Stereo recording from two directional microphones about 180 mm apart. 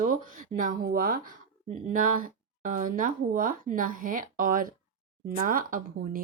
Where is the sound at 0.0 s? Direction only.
50° right (ahead or behind).